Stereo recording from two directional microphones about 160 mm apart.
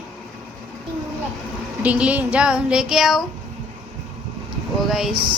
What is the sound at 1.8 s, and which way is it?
A woman's voice, 10° right (ahead or behind).